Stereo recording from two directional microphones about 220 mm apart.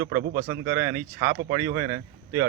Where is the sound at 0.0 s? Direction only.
40° right (ahead or behind).